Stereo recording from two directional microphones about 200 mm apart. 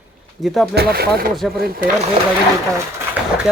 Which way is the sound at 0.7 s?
50° right (ahead or behind).